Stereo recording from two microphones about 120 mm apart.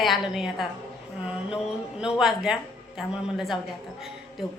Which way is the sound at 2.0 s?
5° right (ahead or behind).